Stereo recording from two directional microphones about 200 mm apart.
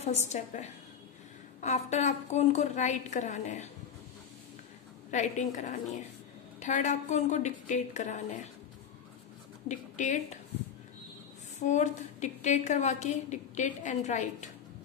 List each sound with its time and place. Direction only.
0.0 s a woman's voice: 35° left (ahead or behind)
5.1 s a woman's voice: 35° left (ahead or behind)
9.7 s speech: 40° left (ahead or behind)
11.6 s a woman's voice: 35° left (ahead or behind)